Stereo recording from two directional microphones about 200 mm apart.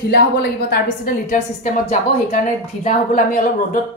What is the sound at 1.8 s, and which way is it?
A woman's voice, 40° left (ahead or behind).